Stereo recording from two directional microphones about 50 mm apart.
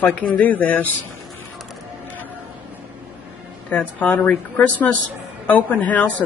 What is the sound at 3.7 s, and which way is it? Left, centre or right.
A woman's voice, left.